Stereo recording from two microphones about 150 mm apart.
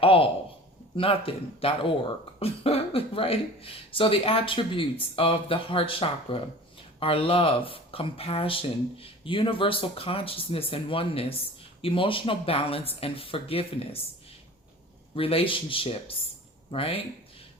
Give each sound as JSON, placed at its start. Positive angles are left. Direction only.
{"t": 0.0, "sound": "a woman's voice", "side_deg": 40}
{"t": 15.1, "sound": "speech", "side_deg": 40}